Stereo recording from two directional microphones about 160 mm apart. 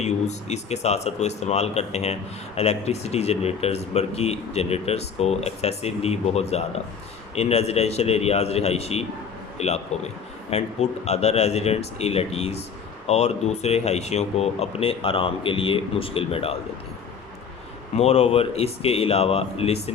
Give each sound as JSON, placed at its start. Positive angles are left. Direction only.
{"t": 0.0, "sound": "speech", "side_deg": 45}
{"t": 17.9, "sound": "speech", "side_deg": 40}